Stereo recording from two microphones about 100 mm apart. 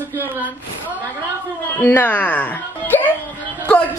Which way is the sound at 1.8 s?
20° left (ahead or behind).